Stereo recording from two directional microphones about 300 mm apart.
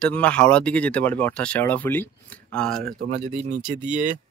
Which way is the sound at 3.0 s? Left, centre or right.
Right.